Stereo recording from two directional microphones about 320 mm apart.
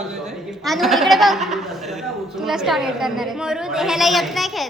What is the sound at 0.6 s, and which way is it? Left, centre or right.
A man's voice, centre.